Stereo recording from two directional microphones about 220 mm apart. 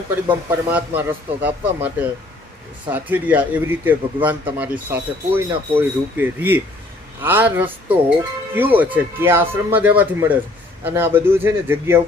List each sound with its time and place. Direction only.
0.1 s a man's voice: 10° right (ahead or behind)
2.9 s a man's voice: 10° right (ahead or behind)